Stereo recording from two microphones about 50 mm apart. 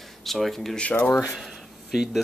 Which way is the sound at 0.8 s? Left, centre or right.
Left.